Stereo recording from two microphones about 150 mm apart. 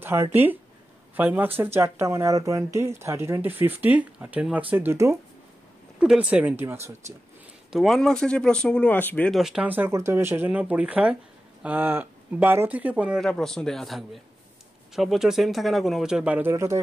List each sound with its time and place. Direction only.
0.0 s speech: 15° right (ahead or behind)
5.9 s speech: 5° right (ahead or behind)
7.7 s speech: centre (ahead or behind)
9.4 s speech: 5° right (ahead or behind)
13.2 s speech: 5° left (ahead or behind); by 16.8 s 20° right (ahead or behind)